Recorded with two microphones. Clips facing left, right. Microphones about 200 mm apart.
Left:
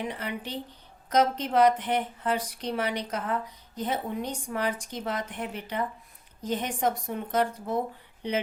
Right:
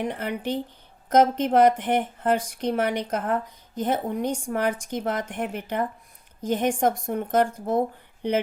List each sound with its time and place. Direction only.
0.0 s speech: 50° right (ahead or behind)